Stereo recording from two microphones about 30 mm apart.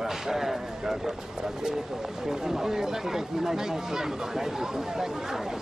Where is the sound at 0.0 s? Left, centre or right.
Centre.